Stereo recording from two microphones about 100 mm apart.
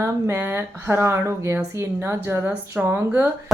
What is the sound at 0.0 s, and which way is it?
Speech, 20° right (ahead or behind).